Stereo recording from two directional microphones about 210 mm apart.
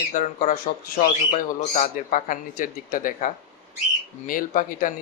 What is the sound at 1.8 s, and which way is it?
Speech, 35° left (ahead or behind).